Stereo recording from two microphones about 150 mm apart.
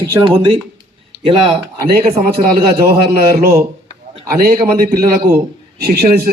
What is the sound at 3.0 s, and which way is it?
Speech, 90° right.